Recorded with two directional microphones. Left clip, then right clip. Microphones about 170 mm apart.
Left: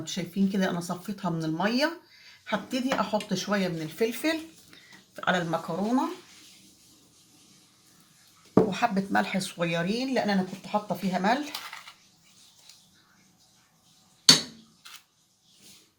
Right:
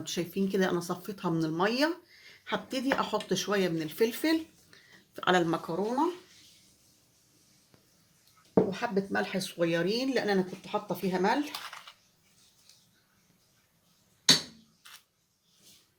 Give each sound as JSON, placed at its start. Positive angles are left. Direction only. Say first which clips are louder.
{"t": 0.0, "sound": "speech", "louder": "left 1 dB", "side_deg": -60}
{"t": 8.7, "sound": "speech", "louder": "left 5 dB", "side_deg": -20}
{"t": 10.2, "sound": "speech", "louder": "left 1 dB", "side_deg": -60}